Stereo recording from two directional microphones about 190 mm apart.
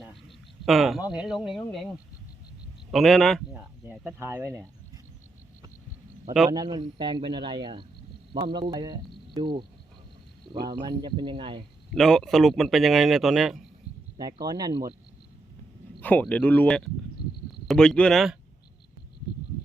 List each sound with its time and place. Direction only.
0.1 s a sound: centre (ahead or behind)
1.1 s speech: 5° right (ahead or behind)
6.5 s speech: 20° right (ahead or behind)
10.5 s speech: centre (ahead or behind)
10.8 s speech: 25° right (ahead or behind)
11.9 s speech: centre (ahead or behind)
14.4 s speech: 20° right (ahead or behind)
16.0 s a sound: 10° left (ahead or behind)
16.2 s speech: 10° left (ahead or behind)